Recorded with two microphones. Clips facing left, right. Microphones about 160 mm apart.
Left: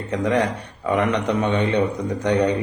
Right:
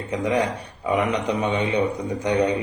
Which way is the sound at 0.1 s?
10° right (ahead or behind).